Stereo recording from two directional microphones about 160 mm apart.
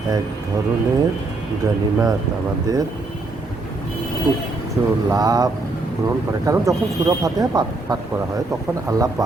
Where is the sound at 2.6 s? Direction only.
20° right (ahead or behind).